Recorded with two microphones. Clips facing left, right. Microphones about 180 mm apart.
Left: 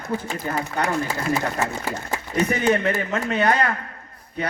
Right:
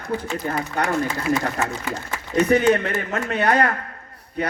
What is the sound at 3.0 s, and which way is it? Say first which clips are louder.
Speech: left 1 dB; 45° right (ahead or behind).